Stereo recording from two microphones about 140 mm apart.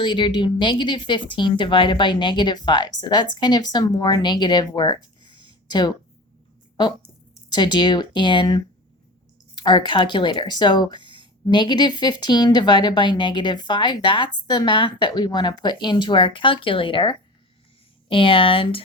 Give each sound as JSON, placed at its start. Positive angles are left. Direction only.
{"t": 0.0, "sound": "speech", "side_deg": 35}
{"t": 7.5, "sound": "speech", "side_deg": 30}
{"t": 11.0, "sound": "a sound", "side_deg": -35}
{"t": 11.5, "sound": "speech", "side_deg": 30}